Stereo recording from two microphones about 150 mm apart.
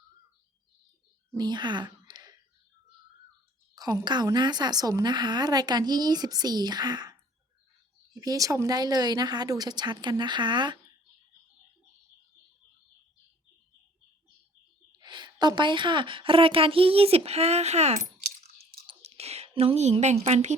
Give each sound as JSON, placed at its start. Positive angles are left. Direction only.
{"t": 1.4, "sound": "speech", "side_deg": -30}
{"t": 4.0, "sound": "a woman's voice", "side_deg": -30}
{"t": 14.9, "sound": "a woman's voice", "side_deg": -30}
{"t": 18.9, "sound": "a sound", "side_deg": -45}